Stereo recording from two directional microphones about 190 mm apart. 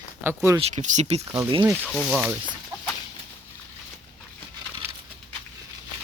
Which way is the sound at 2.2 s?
10° right (ahead or behind).